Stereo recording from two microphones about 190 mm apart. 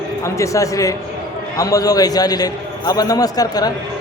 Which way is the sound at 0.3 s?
15° left (ahead or behind).